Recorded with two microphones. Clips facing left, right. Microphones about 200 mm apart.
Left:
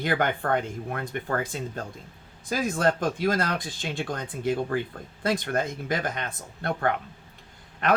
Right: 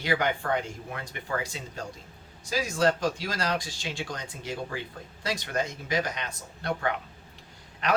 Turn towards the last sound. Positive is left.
turn(degrees=55)  # may be behind; listen again after turning